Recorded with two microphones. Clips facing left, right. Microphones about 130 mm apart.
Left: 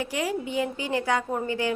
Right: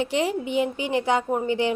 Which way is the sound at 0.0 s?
25° right (ahead or behind).